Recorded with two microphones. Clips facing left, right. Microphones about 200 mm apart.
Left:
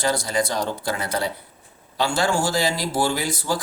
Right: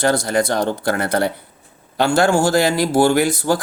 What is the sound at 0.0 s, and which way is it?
Speech, 60° right (ahead or behind).